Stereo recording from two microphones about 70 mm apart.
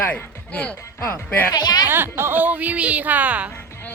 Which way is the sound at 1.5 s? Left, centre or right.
Left.